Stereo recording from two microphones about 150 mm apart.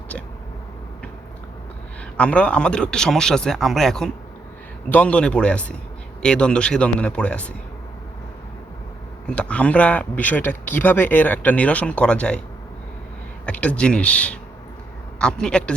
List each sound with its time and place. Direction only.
2.1 s speech: 10° left (ahead or behind)
9.2 s speech: 5° left (ahead or behind)
13.4 s speech: 10° left (ahead or behind)